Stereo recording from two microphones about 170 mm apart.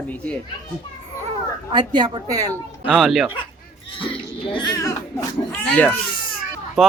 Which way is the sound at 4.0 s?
30° left (ahead or behind).